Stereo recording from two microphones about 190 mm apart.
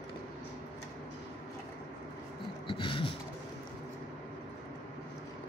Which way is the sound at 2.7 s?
25° left (ahead or behind).